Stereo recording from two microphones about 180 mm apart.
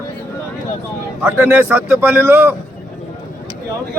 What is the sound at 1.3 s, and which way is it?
Speech, 10° right (ahead or behind).